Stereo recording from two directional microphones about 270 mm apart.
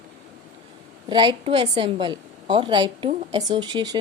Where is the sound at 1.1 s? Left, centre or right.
Centre.